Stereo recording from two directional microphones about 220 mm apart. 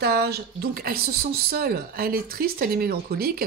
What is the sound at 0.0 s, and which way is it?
Speech, 45° right (ahead or behind).